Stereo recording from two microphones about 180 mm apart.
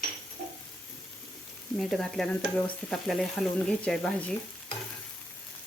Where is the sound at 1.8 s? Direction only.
Centre (ahead or behind).